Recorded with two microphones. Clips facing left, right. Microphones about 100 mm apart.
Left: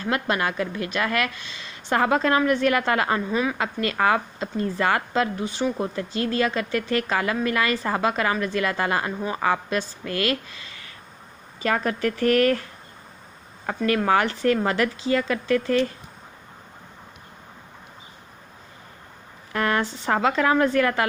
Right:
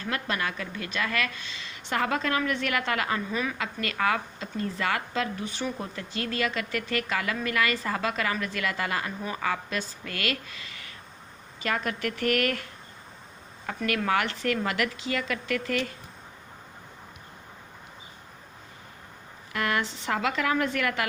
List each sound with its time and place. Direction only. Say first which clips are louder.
0.0 s speech: left 6 dB; 35° left (ahead or behind)
13.7 s speech: left 6 dB; 35° left (ahead or behind)
19.5 s speech: left 5 dB; 35° left (ahead or behind)